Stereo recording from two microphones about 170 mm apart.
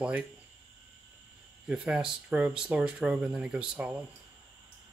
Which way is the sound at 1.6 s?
5° right (ahead or behind).